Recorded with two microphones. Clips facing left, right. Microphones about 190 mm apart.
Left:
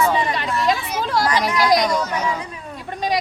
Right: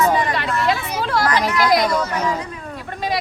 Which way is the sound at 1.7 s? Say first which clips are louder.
Even; 5° right (ahead or behind).